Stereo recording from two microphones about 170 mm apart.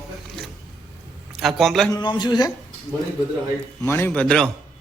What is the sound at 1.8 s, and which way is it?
Speech, 25° left (ahead or behind).